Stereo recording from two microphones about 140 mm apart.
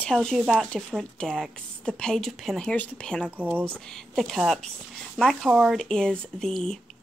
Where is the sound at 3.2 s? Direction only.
10° right (ahead or behind).